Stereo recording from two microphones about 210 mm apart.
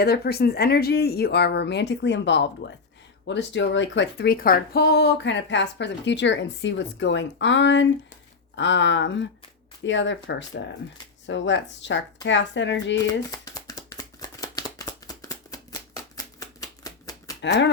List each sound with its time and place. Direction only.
0.0 s speech: 50° left (ahead or behind)
13.3 s a sound: 15° left (ahead or behind)
17.4 s speech: 55° left (ahead or behind)